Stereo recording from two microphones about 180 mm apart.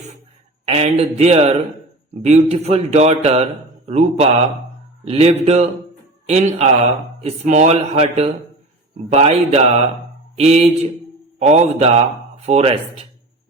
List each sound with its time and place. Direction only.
0.6 s a man's voice: 35° right (ahead or behind)